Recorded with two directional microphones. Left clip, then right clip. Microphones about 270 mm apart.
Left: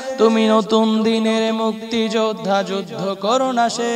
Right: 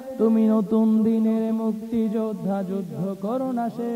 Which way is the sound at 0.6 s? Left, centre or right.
Left.